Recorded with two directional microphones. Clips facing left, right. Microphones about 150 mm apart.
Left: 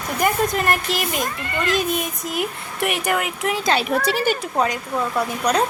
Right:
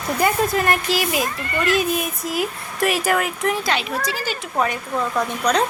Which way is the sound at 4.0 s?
60° left (ahead or behind).